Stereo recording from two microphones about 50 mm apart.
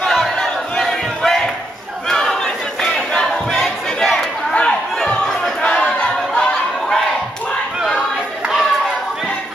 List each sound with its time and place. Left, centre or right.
0.1 s battle cry: centre
4.6 s crowd: centre
5.9 s a sound: centre